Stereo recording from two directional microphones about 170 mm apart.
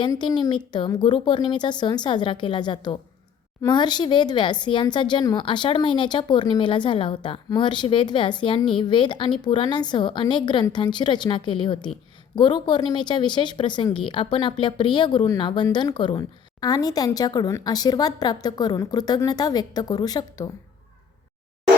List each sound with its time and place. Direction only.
0.0 s speech: 25° left (ahead or behind)